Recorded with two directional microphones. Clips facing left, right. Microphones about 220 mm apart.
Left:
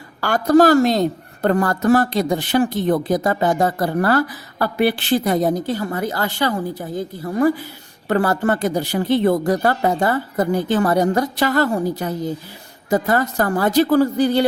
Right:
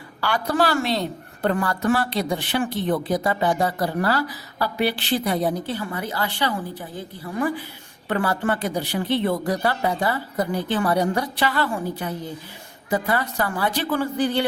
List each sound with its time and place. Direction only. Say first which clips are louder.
0.2 s a woman's voice: left 9 dB; 45° left (ahead or behind)